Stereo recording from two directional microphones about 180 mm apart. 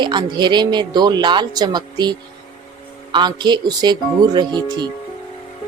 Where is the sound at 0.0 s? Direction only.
25° right (ahead or behind).